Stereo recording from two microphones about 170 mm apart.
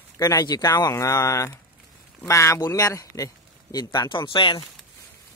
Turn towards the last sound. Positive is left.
turn(degrees=30)  # may be behind; listen again after turning